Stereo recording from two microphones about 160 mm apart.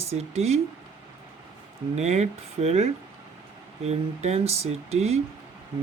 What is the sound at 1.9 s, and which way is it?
Speech, 45° right (ahead or behind).